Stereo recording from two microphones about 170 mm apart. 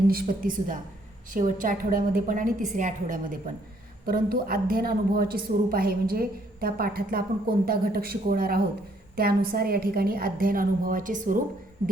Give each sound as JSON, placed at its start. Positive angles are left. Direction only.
{"t": 0.1, "sound": "a woman's voice", "side_deg": -60}
{"t": 4.0, "sound": "a woman's voice", "side_deg": -60}